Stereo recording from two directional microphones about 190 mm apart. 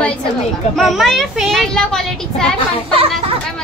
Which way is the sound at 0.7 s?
Centre (ahead or behind).